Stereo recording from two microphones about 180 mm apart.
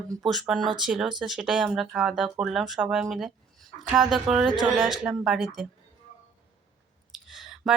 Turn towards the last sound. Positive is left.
turn(degrees=0)  # may be behind; listen again after turning